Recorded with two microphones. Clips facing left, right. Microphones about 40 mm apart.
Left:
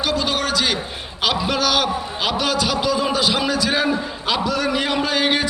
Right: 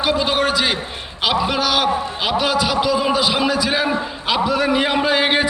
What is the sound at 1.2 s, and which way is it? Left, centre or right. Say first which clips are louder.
A man's voice: right 2 dB; centre.